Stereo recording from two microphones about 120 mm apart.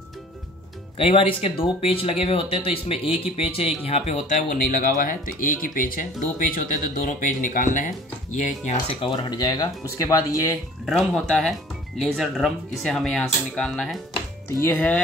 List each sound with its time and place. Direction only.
0.9 s speech: 50° left (ahead or behind); by 8.7 s 75° left (ahead or behind)
9.0 s speech: 45° left (ahead or behind); by 10.6 s 25° left (ahead or behind)
10.9 s speech: 5° left (ahead or behind)
14.5 s speech: 20° left (ahead or behind)